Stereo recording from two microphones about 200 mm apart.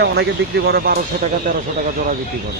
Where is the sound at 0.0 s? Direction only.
55° right (ahead or behind).